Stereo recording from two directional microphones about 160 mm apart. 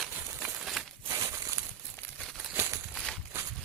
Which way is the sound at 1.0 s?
20° right (ahead or behind).